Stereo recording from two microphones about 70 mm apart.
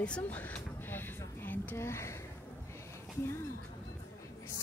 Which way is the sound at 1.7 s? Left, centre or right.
Left.